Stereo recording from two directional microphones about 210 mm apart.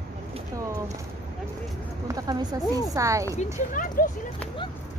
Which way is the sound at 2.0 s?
15° right (ahead or behind).